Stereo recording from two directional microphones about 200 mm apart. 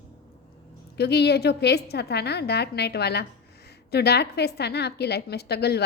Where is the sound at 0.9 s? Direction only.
55° left (ahead or behind).